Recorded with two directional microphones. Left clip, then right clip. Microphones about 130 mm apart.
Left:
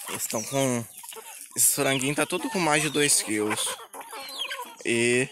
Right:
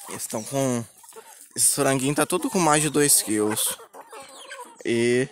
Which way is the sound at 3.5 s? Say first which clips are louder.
Even; 90° right.